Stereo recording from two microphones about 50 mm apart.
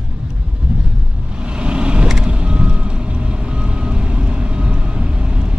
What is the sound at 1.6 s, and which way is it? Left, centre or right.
Vehicle, right.